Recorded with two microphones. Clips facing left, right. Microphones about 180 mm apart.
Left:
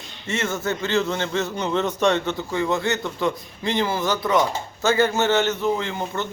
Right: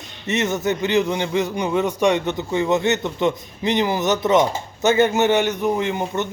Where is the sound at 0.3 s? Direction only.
20° right (ahead or behind).